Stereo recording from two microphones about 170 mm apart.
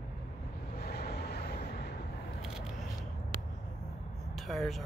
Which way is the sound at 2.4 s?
5° right (ahead or behind).